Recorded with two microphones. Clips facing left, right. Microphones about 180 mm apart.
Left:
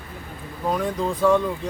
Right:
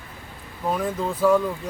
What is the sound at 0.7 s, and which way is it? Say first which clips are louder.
Speech: left 2 dB; 5° right (ahead or behind).